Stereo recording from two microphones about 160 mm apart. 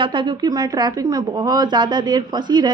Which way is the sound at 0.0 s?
30° right (ahead or behind).